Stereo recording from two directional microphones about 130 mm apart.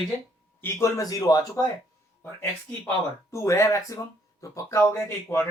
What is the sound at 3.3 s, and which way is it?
Speech, 25° left (ahead or behind).